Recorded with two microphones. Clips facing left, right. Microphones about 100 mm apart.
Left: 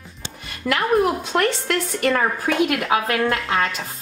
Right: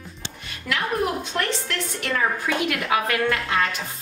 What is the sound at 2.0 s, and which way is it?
Speech, 50° left (ahead or behind).